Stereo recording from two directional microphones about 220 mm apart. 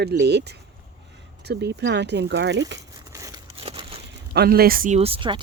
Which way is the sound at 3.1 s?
15° right (ahead or behind).